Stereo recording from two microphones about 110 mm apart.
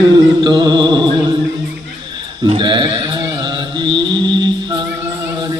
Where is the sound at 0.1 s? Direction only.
40° right (ahead or behind).